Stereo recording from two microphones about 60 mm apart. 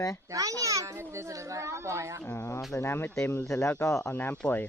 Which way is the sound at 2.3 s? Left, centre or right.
Left.